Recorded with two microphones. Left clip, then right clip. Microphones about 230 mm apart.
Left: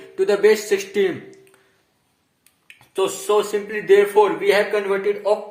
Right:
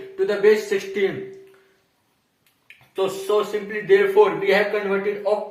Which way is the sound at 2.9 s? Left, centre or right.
Left.